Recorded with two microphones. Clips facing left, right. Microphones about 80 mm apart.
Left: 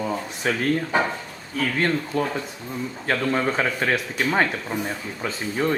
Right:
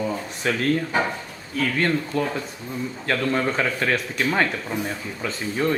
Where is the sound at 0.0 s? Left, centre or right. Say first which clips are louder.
Even; centre.